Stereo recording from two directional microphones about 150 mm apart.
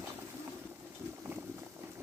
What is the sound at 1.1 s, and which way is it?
Boiling, 15° right (ahead or behind).